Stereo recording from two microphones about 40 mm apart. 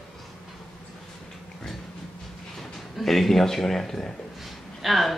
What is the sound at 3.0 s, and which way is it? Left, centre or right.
A woman's voice, centre.